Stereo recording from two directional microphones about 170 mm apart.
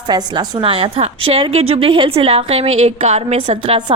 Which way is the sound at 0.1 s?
30° right (ahead or behind).